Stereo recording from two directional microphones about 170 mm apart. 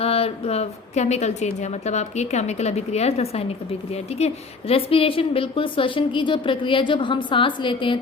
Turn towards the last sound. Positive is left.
turn(degrees=30)  # may be behind; listen again after turning